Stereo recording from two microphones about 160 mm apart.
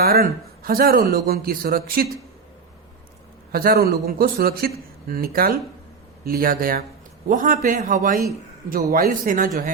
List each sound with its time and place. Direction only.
0.0 s a man's voice: 70° right (ahead or behind)
3.5 s a man's voice: 70° right (ahead or behind)